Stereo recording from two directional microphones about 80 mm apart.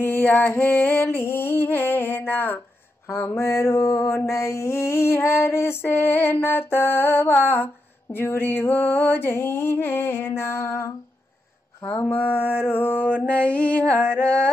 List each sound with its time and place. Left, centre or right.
0.0 s a sound: left
3.1 s mantra: left
13.3 s music: centre